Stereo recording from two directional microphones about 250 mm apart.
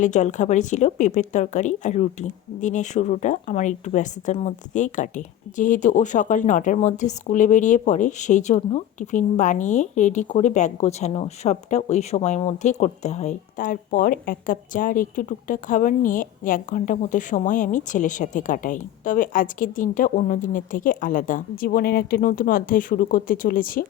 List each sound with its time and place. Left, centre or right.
0.0 s speech: left